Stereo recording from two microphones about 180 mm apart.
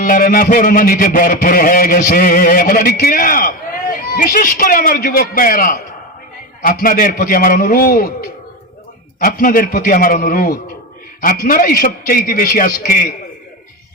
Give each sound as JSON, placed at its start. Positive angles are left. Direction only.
{"t": 0.0, "sound": "a man's voice", "side_deg": 55}